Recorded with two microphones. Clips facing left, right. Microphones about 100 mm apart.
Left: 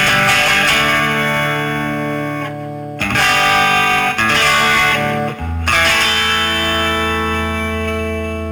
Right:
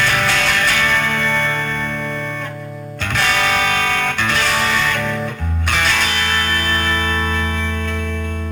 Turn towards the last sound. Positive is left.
turn(degrees=65)  # may be behind; listen again after turning